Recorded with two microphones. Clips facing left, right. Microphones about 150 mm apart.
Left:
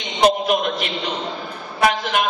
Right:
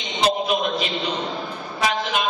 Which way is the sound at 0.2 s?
55° left (ahead or behind).